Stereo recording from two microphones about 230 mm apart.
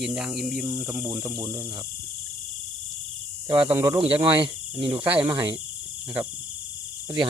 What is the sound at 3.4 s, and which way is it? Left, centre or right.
Speech, right.